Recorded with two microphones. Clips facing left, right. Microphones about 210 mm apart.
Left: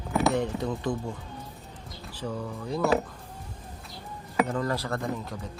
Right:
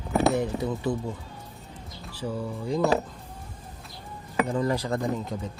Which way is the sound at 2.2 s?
10° right (ahead or behind).